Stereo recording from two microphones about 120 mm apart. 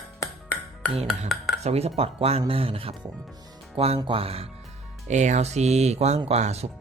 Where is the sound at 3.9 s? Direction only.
45° right (ahead or behind).